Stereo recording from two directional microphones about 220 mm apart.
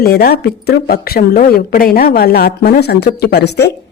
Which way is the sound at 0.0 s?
45° left (ahead or behind).